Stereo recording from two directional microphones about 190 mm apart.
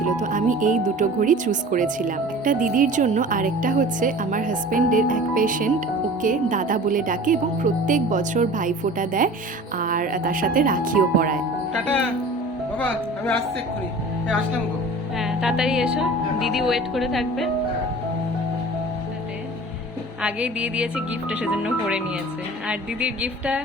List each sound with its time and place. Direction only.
0.2 s speech: 45° right (ahead or behind)
15.2 s speech: centre (ahead or behind)
20.2 s speech: 5° right (ahead or behind)